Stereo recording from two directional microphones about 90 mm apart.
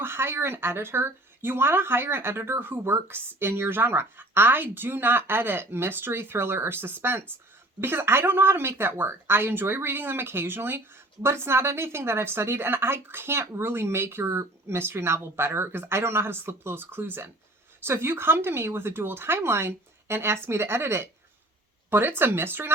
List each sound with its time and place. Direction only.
0.0 s speech: 25° right (ahead or behind)